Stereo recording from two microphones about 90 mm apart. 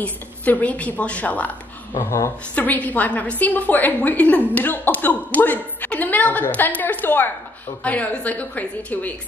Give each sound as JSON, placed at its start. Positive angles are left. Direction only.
{"t": 0.0, "sound": "a woman's voice", "side_deg": 15}
{"t": 2.0, "sound": "a woman's voice", "side_deg": 35}
{"t": 2.5, "sound": "a woman's voice", "side_deg": 15}